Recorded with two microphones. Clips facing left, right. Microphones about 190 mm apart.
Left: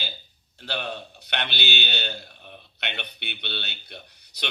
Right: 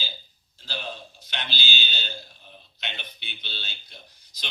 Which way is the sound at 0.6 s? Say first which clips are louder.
Left 4 dB; 65° left (ahead or behind).